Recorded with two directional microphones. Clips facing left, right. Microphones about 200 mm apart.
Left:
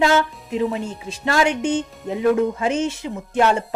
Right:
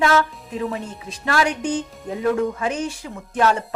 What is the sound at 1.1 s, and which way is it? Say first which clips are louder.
Speech: left 2 dB; 25° left (ahead or behind).